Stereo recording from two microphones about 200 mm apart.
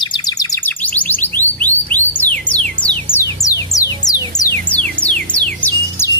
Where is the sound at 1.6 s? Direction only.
10° left (ahead or behind).